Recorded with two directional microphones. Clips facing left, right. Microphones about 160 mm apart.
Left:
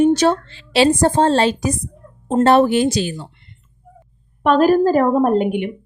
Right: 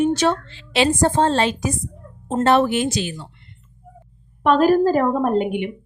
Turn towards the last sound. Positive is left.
turn(degrees=45)  # may be behind; listen again after turning